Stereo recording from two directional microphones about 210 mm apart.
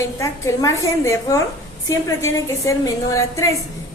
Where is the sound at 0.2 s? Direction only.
15° left (ahead or behind).